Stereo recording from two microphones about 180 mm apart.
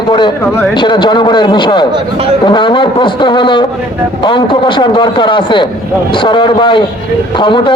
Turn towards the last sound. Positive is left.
turn(degrees=25)  # may be behind; listen again after turning